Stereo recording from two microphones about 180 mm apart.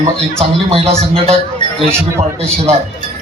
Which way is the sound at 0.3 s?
30° right (ahead or behind).